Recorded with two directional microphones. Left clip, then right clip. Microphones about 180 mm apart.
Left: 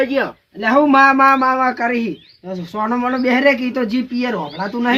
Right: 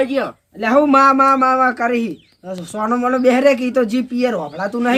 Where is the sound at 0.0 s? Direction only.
50° right (ahead or behind).